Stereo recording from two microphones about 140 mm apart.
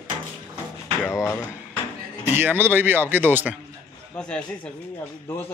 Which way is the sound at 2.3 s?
15° right (ahead or behind).